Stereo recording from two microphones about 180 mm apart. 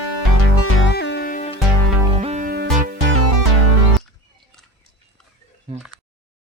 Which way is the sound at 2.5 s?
55° right (ahead or behind).